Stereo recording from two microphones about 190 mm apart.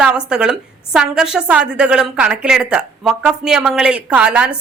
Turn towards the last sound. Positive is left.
turn(degrees=-5)  # may be behind; listen again after turning